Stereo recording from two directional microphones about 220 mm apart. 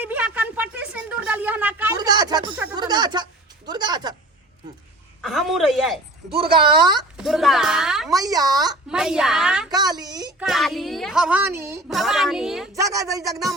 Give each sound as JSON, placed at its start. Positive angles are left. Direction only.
{"t": 0.0, "sound": "a sound", "side_deg": -5}
{"t": 2.0, "sound": "a sound", "side_deg": -20}
{"t": 5.2, "sound": "a sound", "side_deg": 0}
{"t": 7.2, "sound": "speech", "side_deg": 0}
{"t": 8.1, "sound": "a woman's voice", "side_deg": -15}
{"t": 8.7, "sound": "a child's voice", "side_deg": -5}
{"t": 9.6, "sound": "a woman's voice", "side_deg": -20}
{"t": 10.4, "sound": "a child's voice", "side_deg": 0}
{"t": 11.9, "sound": "a child's voice", "side_deg": 0}
{"t": 12.7, "sound": "a woman's voice", "side_deg": -15}
{"t": 13.3, "sound": "a child's voice", "side_deg": 0}